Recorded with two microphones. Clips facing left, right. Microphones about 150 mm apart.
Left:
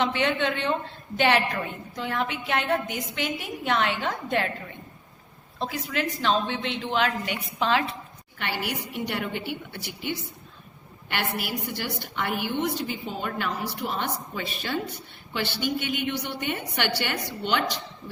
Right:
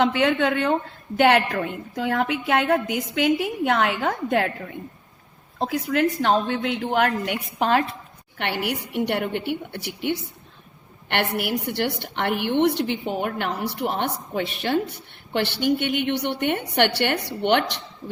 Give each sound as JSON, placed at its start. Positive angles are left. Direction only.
{"t": 0.0, "sound": "a woman's voice", "side_deg": -60}
{"t": 8.4, "sound": "a woman's voice", "side_deg": -60}